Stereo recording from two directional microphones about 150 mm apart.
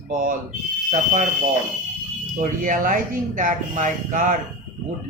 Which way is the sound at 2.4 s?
65° right (ahead or behind).